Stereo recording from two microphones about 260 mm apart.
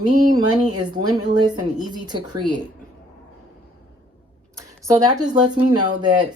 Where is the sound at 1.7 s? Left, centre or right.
Centre.